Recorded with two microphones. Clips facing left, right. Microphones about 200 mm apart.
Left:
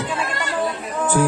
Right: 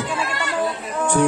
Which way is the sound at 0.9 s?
Centre (ahead or behind).